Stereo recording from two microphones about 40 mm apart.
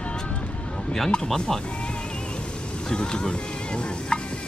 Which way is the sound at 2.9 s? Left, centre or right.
Left.